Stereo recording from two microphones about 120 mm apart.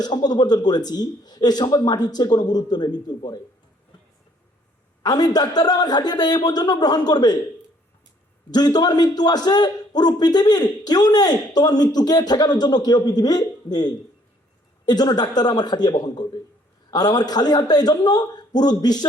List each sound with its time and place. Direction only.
0.0 s a man's voice: 35° left (ahead or behind)
5.0 s a man's voice: 35° left (ahead or behind)
8.4 s a man's voice: 35° left (ahead or behind)